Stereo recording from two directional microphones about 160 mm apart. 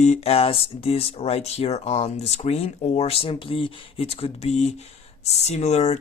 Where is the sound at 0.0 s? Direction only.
40° left (ahead or behind).